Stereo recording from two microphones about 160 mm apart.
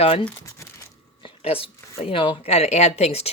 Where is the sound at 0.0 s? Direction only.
40° left (ahead or behind).